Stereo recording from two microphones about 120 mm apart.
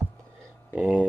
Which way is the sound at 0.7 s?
10° right (ahead or behind).